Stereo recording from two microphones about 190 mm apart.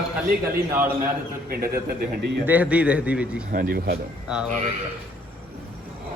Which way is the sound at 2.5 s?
10° right (ahead or behind).